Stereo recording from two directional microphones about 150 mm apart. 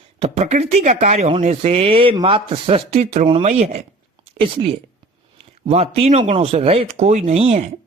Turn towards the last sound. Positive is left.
turn(degrees=-45)  # may be behind; listen again after turning